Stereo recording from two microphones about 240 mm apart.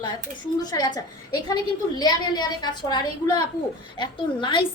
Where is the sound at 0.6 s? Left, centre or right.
Centre.